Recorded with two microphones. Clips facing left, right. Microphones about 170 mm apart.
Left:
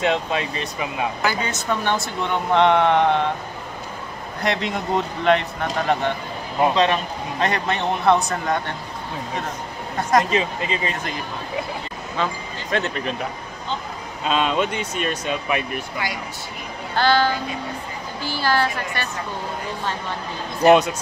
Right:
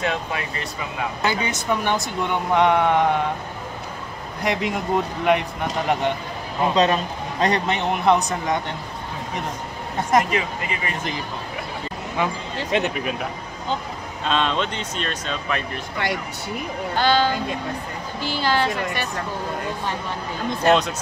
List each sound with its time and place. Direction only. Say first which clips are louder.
0.0 s speech: left 4 dB; 20° left (ahead or behind)
1.2 s speech: even; 20° right (ahead or behind)
4.4 s speech: even; 10° right (ahead or behind)
6.7 s speech: even; 40° right (ahead or behind)
7.6 s speech: even; 15° right (ahead or behind)
10.3 s speech: left 3 dB; 25° left (ahead or behind)
12.2 s speech: right 1 dB; 15° right (ahead or behind)
14.2 s speech: left 2 dB; 5° left (ahead or behind)
16.9 s speech: left 1 dB; 20° right (ahead or behind)
20.6 s speech: left 4 dB; 15° left (ahead or behind)